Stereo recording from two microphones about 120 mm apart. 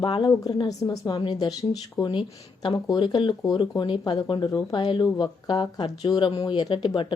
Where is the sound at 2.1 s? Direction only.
45° left (ahead or behind).